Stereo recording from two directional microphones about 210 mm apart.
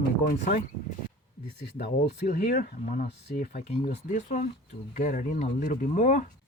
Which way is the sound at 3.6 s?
30° left (ahead or behind).